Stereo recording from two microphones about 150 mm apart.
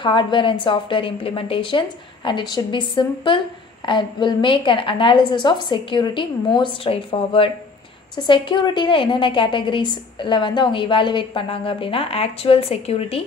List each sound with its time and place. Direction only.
0.0 s a woman's voice: 35° left (ahead or behind)